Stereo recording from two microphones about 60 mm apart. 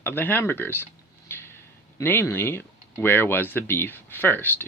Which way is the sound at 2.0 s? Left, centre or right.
Left.